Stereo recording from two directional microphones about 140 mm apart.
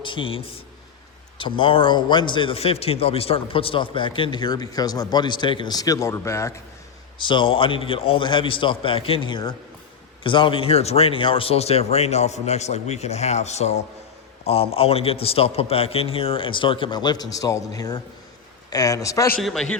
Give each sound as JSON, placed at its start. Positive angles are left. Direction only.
{"t": 0.0, "sound": "a man's voice", "side_deg": 35}
{"t": 7.2, "sound": "a man's voice", "side_deg": 35}
{"t": 19.4, "sound": "a man's voice", "side_deg": 0}